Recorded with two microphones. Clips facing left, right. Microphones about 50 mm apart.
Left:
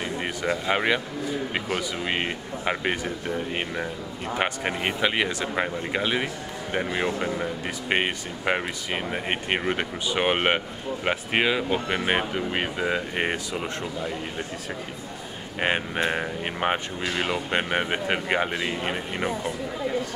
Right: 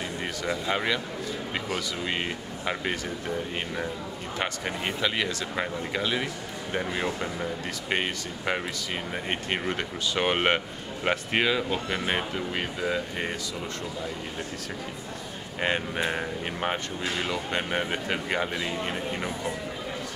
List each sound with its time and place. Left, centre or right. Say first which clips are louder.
0.2 s speech: left 3 dB; left
4.4 s speech: left 4 dB; left
13.1 s speech: left 5 dB; left
16.0 s speech: left 3 dB; centre